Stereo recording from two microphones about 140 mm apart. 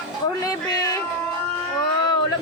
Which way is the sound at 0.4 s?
25° left (ahead or behind).